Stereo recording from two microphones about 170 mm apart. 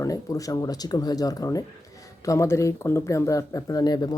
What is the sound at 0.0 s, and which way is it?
Speech, 20° left (ahead or behind).